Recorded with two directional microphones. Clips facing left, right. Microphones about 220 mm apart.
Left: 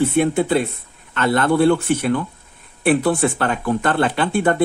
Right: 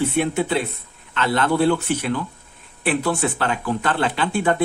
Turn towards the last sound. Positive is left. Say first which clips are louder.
# left 3 dB
turn(degrees=55)  # may be behind; listen again after turning